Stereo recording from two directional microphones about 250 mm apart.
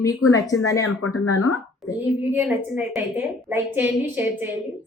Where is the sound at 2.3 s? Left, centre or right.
Centre.